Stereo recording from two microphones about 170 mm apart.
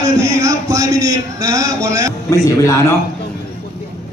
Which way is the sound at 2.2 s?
20° left (ahead or behind).